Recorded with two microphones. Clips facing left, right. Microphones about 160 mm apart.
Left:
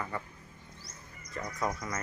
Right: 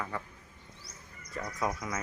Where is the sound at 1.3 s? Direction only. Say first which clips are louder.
Even; 10° right (ahead or behind).